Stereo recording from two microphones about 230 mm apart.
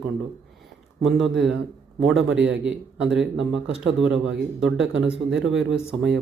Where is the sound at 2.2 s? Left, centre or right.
Right.